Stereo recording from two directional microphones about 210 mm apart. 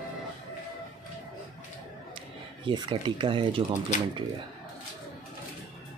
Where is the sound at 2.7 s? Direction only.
25° right (ahead or behind).